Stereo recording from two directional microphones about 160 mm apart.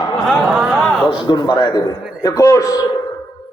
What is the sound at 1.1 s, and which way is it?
A man's voice, 25° left (ahead or behind).